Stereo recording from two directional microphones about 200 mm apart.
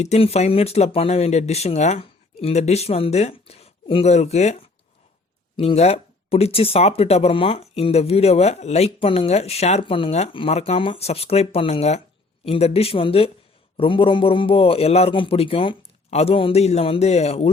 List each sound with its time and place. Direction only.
0.0 s a man's voice: 30° left (ahead or behind)